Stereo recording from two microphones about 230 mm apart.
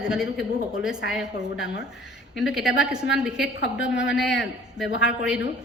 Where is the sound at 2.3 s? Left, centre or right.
Centre.